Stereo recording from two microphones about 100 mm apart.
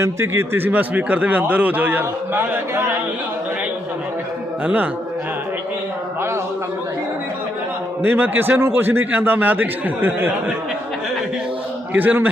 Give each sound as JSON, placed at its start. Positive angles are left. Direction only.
{"t": 0.0, "sound": "speech", "side_deg": -25}
{"t": 4.6, "sound": "a man's voice", "side_deg": -15}
{"t": 8.0, "sound": "speech", "side_deg": -20}
{"t": 11.9, "sound": "speech", "side_deg": -20}